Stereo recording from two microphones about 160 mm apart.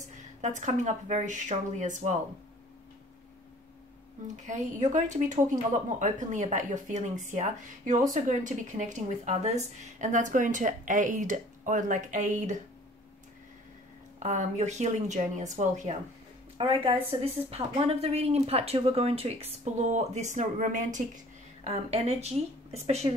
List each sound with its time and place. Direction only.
0.4 s speech: 50° right (ahead or behind)
4.4 s speech: 50° right (ahead or behind)
14.2 s speech: 50° right (ahead or behind)
16.5 s speech: 35° right (ahead or behind); by 21.0 s 50° right (ahead or behind)
21.6 s speech: 40° right (ahead or behind)